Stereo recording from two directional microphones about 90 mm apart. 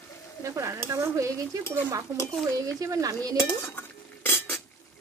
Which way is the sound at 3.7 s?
25° left (ahead or behind).